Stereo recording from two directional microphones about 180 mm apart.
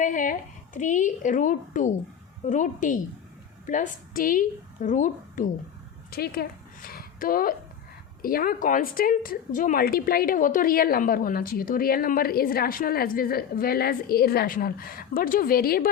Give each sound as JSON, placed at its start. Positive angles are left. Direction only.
{"t": 0.0, "sound": "a woman's voice", "side_deg": 45}
{"t": 6.1, "sound": "a sound", "side_deg": 60}
{"t": 8.2, "sound": "a woman's voice", "side_deg": 55}